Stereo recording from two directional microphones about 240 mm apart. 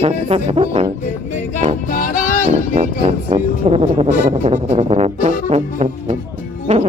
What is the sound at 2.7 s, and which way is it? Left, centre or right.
Speech, right.